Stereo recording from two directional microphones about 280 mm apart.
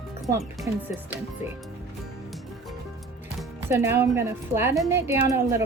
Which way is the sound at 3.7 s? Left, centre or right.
Centre.